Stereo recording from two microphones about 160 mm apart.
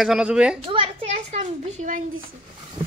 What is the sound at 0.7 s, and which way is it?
A child's voice, 35° right (ahead or behind).